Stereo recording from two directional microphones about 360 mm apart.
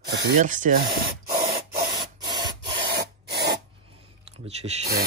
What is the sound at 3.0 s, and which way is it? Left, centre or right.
Rub, right.